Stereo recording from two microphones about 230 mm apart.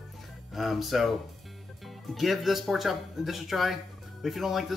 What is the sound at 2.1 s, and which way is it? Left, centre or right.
Speech, centre.